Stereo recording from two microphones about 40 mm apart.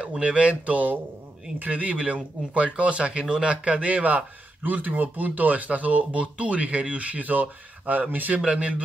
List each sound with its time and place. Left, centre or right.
0.0 s speech: right
8.5 s speech: right